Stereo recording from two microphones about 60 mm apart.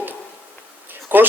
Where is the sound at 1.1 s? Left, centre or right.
Right.